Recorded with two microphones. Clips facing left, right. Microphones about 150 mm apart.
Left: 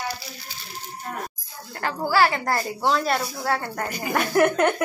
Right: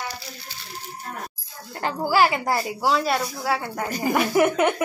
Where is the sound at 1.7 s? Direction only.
20° right (ahead or behind).